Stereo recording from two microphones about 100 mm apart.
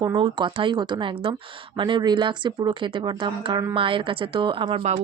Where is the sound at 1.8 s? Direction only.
45° right (ahead or behind).